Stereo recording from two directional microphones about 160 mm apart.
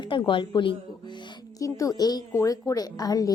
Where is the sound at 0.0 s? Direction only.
30° left (ahead or behind).